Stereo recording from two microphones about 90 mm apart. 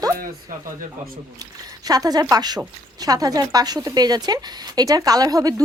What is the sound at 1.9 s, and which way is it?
Speech, 45° right (ahead or behind).